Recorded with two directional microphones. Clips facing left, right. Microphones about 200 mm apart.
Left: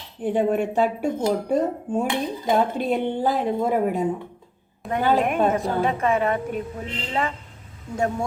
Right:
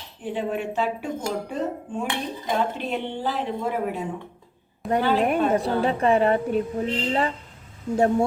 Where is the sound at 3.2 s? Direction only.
45° left (ahead or behind).